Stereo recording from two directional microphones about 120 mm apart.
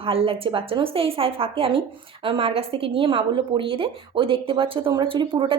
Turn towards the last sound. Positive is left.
turn(degrees=-45)  # may be behind; listen again after turning